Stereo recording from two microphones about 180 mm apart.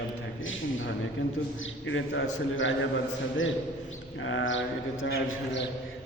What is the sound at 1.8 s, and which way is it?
A man's voice, 90° left.